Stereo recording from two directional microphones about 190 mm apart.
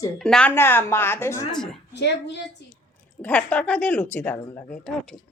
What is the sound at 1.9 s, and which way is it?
Speech, 65° left (ahead or behind).